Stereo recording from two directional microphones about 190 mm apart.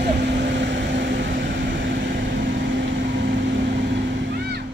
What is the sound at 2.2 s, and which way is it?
Vehicle, 50° right (ahead or behind).